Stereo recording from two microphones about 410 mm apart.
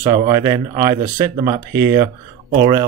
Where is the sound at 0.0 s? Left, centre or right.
Centre.